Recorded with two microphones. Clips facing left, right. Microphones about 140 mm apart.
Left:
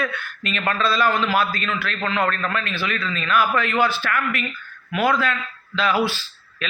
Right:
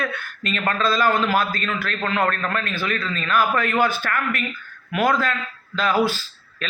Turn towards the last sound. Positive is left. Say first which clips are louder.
# even
turn(degrees=-40)  # may be behind; listen again after turning